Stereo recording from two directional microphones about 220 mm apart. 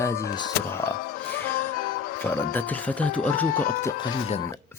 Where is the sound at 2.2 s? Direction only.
10° left (ahead or behind).